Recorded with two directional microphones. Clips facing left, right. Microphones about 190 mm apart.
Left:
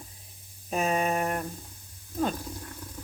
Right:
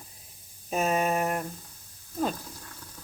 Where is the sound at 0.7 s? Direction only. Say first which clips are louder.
Right 1 dB; centre (ahead or behind).